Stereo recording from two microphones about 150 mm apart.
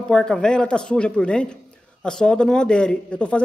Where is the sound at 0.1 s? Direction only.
5° left (ahead or behind).